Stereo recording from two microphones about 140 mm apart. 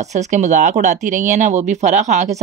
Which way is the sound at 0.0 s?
55° right (ahead or behind).